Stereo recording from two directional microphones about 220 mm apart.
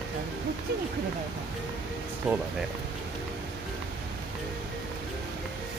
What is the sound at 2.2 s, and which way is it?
Speech, centre (ahead or behind).